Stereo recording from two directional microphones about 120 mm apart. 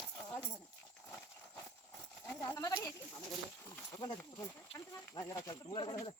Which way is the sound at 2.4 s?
25° left (ahead or behind).